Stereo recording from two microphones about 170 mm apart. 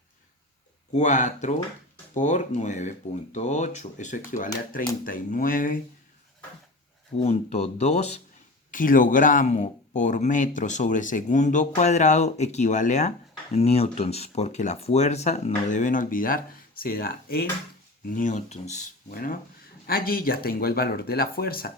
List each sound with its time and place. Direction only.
0.9 s speech: 45° left (ahead or behind)
7.2 s speech: 40° left (ahead or behind)
8.7 s speech: 55° left (ahead or behind)
18.0 s speech: 50° left (ahead or behind)
19.1 s speech: 55° left (ahead or behind)